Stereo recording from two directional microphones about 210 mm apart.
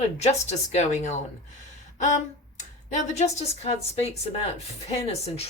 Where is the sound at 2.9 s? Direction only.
35° left (ahead or behind).